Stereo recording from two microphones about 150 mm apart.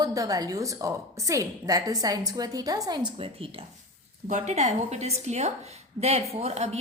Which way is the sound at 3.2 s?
40° right (ahead or behind).